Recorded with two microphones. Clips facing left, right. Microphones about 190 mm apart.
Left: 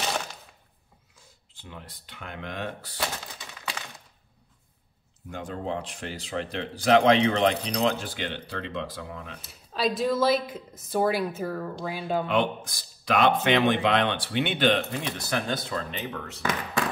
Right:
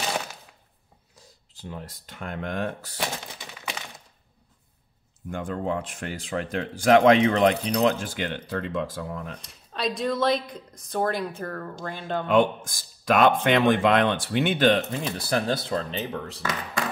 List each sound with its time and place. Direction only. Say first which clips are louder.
1.1 s speech: right 6 dB; 40° right (ahead or behind)
3.0 s crack: right 1 dB; 20° right (ahead or behind)
5.3 s speech: right 4 dB; 50° right (ahead or behind)
9.4 s speech: left 4 dB; 5° left (ahead or behind)
12.3 s speech: right 5 dB; 45° right (ahead or behind)